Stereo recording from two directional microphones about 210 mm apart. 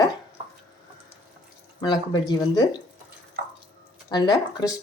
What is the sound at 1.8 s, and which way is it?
Speech, 20° left (ahead or behind).